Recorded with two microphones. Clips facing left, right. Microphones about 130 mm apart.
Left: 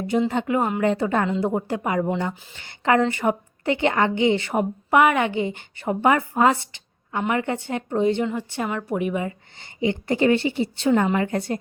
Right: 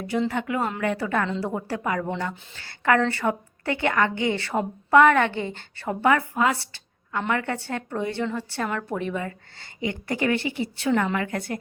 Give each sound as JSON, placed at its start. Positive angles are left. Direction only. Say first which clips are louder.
{"t": 0.1, "sound": "a woman's voice", "louder": "left 4 dB", "side_deg": 25}
{"t": 6.3, "sound": "speech", "louder": "left 4 dB", "side_deg": 35}
{"t": 6.6, "sound": "a woman's voice", "louder": "even", "side_deg": 20}